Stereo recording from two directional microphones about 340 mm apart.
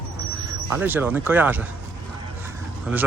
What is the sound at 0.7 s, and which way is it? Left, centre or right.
Speech, centre.